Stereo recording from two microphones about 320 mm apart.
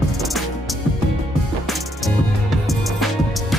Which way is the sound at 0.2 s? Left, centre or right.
Centre.